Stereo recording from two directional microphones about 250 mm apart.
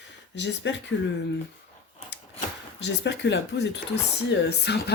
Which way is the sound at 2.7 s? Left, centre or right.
Left.